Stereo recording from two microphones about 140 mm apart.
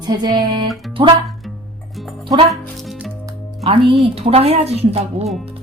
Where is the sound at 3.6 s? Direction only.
40° right (ahead or behind).